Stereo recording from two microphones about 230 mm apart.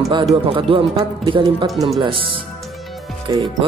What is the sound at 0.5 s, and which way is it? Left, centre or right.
Speech, right.